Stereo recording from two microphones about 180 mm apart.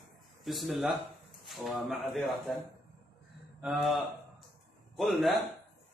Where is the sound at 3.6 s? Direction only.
Centre (ahead or behind).